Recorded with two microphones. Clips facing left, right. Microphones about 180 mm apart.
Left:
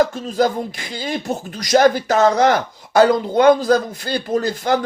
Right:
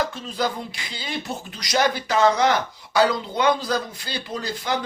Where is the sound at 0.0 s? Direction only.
45° left (ahead or behind).